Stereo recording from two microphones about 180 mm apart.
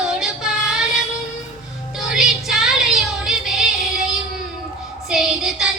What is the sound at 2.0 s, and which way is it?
Music, centre (ahead or behind).